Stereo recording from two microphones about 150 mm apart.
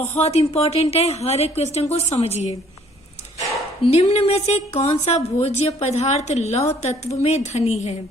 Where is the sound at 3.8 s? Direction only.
45° left (ahead or behind).